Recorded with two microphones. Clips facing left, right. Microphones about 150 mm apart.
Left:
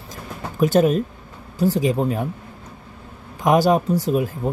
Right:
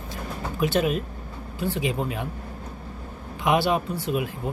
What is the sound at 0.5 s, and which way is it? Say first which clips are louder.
Speech: left 7 dB; 40° left (ahead or behind).